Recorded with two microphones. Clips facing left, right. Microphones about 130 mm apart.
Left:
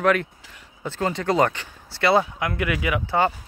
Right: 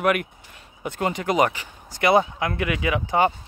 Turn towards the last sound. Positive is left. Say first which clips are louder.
# right 1 dB
turn(degrees=-20)  # may be behind; listen again after turning